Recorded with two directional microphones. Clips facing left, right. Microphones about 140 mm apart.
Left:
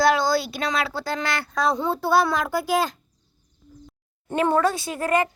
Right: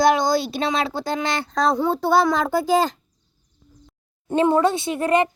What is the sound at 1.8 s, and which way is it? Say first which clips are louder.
Child singing: right 2 dB; 20° right (ahead or behind).